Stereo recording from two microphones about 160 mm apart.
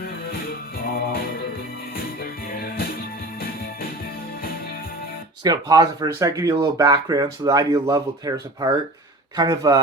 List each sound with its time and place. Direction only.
0.9 s music: 65° left (ahead or behind)
5.4 s speech: 25° right (ahead or behind)